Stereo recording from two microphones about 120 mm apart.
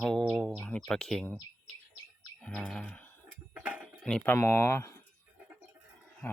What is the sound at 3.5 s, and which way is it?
Tick-tock, 10° right (ahead or behind).